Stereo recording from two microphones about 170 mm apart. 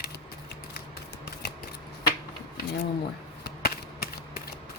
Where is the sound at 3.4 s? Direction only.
65° left (ahead or behind).